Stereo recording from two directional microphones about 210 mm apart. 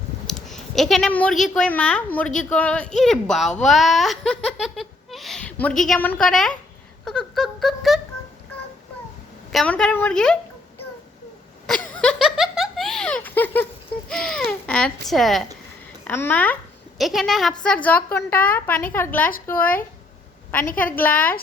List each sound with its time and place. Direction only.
0.3 s speech: centre (ahead or behind)
7.0 s a sound: 5° left (ahead or behind)
9.5 s speech: 5° left (ahead or behind)
11.6 s giggle: 5° left (ahead or behind)
14.1 s a woman's voice: 5° left (ahead or behind)
20.9 s a woman's voice: 10° left (ahead or behind)